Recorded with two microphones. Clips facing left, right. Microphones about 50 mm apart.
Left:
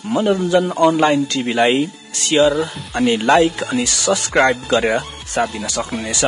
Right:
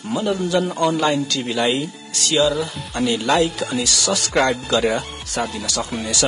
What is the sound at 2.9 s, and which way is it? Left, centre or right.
Speech, centre.